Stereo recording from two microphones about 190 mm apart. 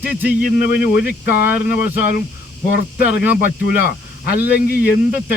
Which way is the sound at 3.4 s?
55° left (ahead or behind).